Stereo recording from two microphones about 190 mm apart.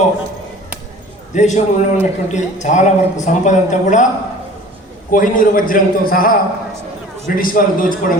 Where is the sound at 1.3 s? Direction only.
40° left (ahead or behind).